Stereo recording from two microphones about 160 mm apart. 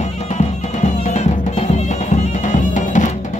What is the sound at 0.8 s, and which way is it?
Music, 45° left (ahead or behind).